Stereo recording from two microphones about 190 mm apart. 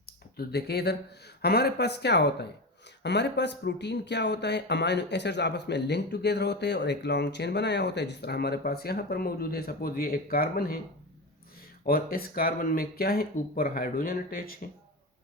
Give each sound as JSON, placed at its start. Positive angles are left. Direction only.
{"t": 0.0, "sound": "a sound", "side_deg": 55}
{"t": 1.4, "sound": "speech", "side_deg": 55}
{"t": 11.9, "sound": "speech", "side_deg": 50}